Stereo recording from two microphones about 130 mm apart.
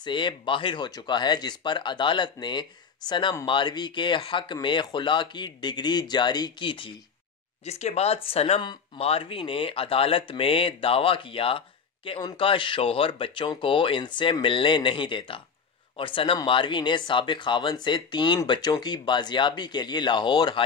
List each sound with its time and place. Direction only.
0.0 s speech: 35° left (ahead or behind)
7.6 s speech: 55° left (ahead or behind); by 20.6 s 35° left (ahead or behind)